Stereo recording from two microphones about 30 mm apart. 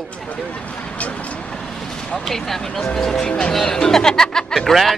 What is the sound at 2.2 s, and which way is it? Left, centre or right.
Speech, centre.